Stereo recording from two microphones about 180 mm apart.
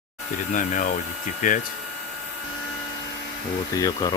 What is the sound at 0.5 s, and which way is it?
Speech, 45° left (ahead or behind).